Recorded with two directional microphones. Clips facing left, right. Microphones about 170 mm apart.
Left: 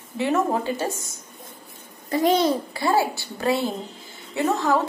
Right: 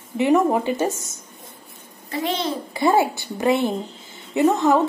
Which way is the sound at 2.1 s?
45° left (ahead or behind).